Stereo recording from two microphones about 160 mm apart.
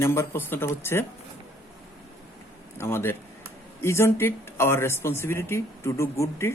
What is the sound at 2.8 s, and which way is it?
A man's voice, 15° left (ahead or behind).